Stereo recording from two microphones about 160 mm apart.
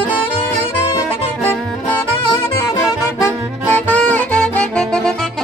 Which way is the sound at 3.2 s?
10° left (ahead or behind).